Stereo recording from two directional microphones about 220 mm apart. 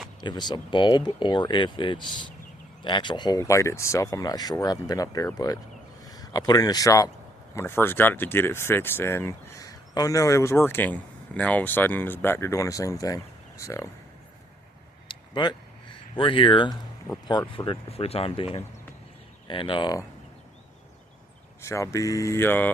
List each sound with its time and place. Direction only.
0.2 s speech: 20° left (ahead or behind)
15.0 s a sound: 20° left (ahead or behind)
16.1 s speech: 25° left (ahead or behind)
21.6 s speech: 15° left (ahead or behind)